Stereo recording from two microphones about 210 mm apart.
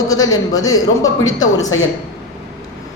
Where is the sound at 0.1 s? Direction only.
15° left (ahead or behind).